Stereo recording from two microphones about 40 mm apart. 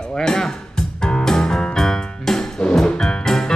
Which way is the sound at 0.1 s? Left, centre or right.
Centre.